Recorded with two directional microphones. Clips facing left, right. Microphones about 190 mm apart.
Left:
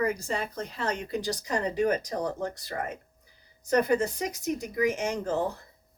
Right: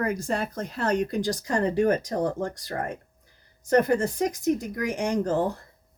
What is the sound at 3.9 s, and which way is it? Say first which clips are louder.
Speech: right 2 dB; 50° right (ahead or behind).